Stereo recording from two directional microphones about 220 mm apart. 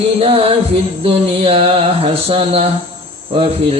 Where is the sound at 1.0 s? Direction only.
25° right (ahead or behind).